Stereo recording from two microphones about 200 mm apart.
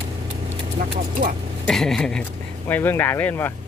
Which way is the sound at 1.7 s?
Centre (ahead or behind).